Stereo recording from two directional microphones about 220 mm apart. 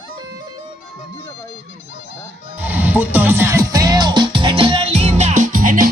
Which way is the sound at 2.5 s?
10° right (ahead or behind).